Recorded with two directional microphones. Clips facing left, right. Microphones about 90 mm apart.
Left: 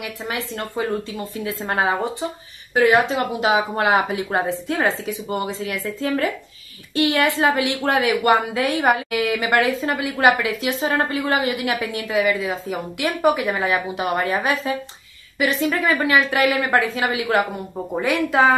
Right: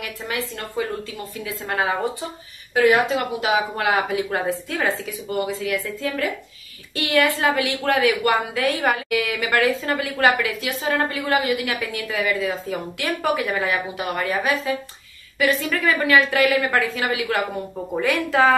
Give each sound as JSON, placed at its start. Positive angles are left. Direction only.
{"t": 0.0, "sound": "a woman's voice", "side_deg": 25}